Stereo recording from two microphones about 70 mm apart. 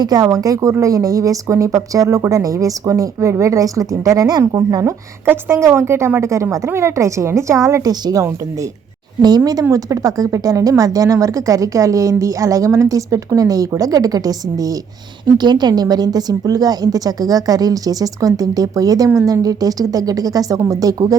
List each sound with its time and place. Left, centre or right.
0.0 s a woman's voice: right
5.2 s a woman's voice: right
7.9 s a woman's voice: right
9.2 s a woman's voice: right
15.4 s a woman's voice: right